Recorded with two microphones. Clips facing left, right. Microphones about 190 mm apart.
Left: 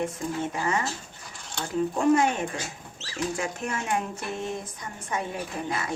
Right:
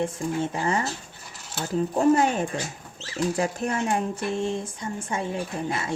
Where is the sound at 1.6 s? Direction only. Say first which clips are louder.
Right 2 dB; 5° right (ahead or behind).